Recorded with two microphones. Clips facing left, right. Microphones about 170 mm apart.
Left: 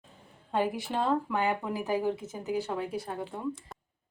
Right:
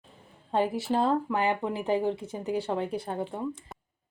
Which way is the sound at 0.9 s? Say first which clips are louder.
Right 3 dB; 35° right (ahead or behind).